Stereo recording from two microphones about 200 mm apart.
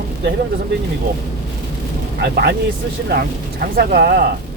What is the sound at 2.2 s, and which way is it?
Speech, 55° right (ahead or behind).